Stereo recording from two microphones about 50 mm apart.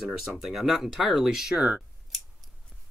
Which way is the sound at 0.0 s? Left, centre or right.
Centre.